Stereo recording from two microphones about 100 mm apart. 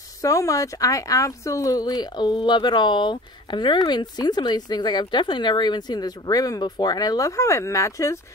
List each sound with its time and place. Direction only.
0.2 s speech: 35° left (ahead or behind)